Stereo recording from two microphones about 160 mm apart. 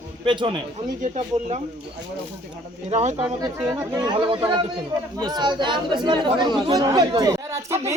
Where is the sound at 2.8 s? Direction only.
45° right (ahead or behind).